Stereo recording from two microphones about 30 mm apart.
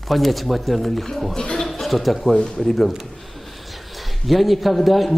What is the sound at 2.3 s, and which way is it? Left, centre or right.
Speech, left.